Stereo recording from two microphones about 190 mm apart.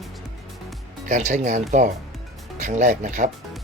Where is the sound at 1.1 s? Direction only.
40° right (ahead or behind).